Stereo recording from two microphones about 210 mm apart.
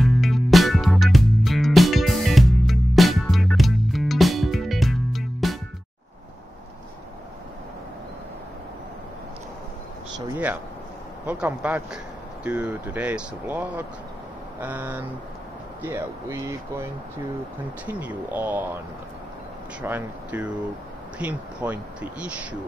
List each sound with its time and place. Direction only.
0.0 s music: centre (ahead or behind)
10.1 s a sound: 10° right (ahead or behind)
11.2 s speech: 5° right (ahead or behind)
17.8 s speech: 10° right (ahead or behind)
19.8 s speech: 10° right (ahead or behind)